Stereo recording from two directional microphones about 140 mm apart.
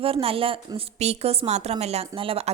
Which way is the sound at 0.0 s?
40° right (ahead or behind).